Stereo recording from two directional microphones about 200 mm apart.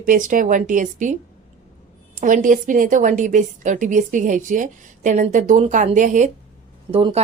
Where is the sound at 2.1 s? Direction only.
40° right (ahead or behind).